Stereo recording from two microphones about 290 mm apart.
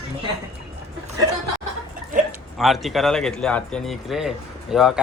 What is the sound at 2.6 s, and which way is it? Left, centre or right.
Speech, centre.